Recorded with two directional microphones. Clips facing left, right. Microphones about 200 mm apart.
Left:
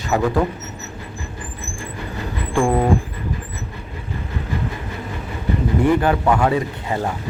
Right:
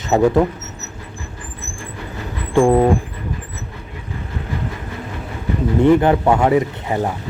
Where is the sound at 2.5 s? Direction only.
20° right (ahead or behind).